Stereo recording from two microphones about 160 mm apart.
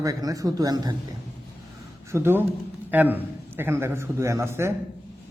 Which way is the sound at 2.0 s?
15° right (ahead or behind).